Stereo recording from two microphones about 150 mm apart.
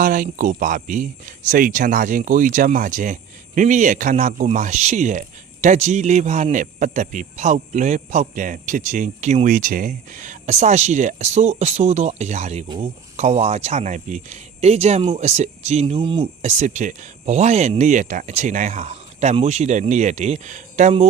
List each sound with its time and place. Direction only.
0.0 s a man's voice: 65° right (ahead or behind); by 16.3 s 35° right (ahead or behind)
16.4 s a man's voice: 50° right (ahead or behind)